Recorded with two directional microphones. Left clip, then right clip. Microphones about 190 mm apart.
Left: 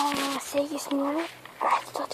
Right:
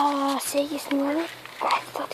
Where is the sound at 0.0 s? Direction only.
Centre (ahead or behind).